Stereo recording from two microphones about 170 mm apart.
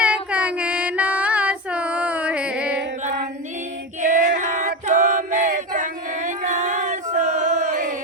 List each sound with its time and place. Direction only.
0.0 s female singing: 10° right (ahead or behind)
4.0 s female singing: 50° right (ahead or behind)